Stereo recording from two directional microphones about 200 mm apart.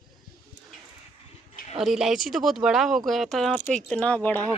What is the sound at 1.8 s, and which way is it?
Speech, centre (ahead or behind).